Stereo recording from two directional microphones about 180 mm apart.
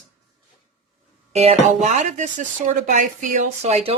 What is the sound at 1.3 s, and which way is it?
Speech, 40° right (ahead or behind).